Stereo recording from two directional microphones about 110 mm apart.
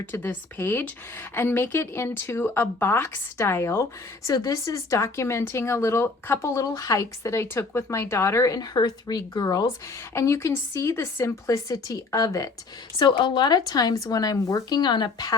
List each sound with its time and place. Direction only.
0.0 s speech: 20° left (ahead or behind)
13.0 s speech: 45° left (ahead or behind)